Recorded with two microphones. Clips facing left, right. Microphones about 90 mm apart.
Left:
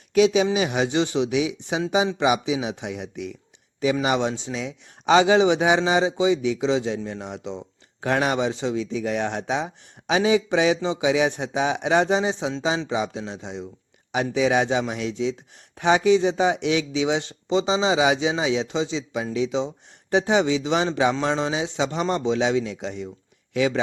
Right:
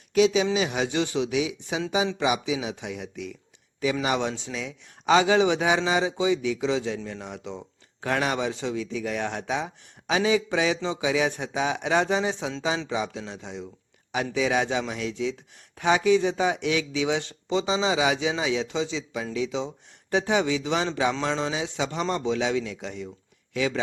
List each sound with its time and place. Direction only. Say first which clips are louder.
0.7 s speech: left 4 dB; 25° left (ahead or behind)
10.8 s a man's voice: left 4 dB; 10° left (ahead or behind)
11.0 s speech: left 4 dB; 20° left (ahead or behind)